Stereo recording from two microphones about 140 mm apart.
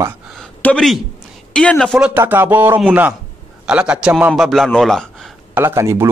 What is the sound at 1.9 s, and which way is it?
Speech, 10° right (ahead or behind).